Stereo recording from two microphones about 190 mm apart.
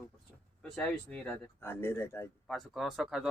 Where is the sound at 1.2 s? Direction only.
10° left (ahead or behind).